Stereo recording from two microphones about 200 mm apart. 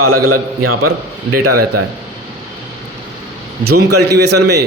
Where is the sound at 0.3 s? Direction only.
90° right.